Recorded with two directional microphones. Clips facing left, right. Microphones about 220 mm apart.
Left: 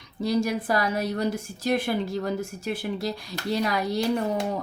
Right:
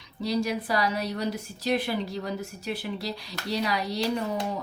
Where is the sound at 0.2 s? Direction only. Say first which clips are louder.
Left 3 dB; 50° left (ahead or behind).